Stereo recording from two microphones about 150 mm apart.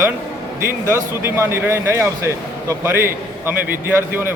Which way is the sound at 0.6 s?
15° right (ahead or behind).